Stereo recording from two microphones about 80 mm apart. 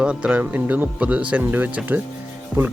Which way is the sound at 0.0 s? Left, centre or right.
Centre.